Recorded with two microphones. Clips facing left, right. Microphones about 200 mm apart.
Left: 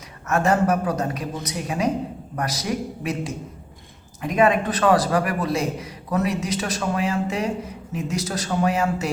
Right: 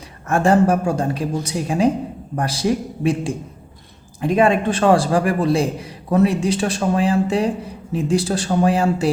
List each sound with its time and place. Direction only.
0.3 s a man's voice: 30° right (ahead or behind)